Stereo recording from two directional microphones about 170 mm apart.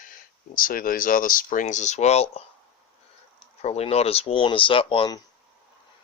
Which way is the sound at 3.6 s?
40° left (ahead or behind).